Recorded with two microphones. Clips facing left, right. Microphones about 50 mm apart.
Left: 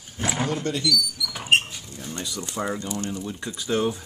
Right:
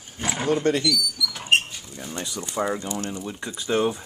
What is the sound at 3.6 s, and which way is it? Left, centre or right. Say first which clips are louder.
Speech: right 2 dB; centre.